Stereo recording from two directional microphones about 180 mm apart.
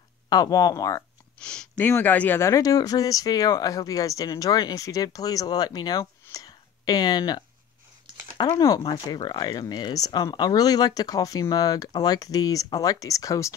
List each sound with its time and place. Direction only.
0.3 s speech: 20° left (ahead or behind)
1.4 s a sound: 5° left (ahead or behind)
1.9 s speech: 10° left (ahead or behind)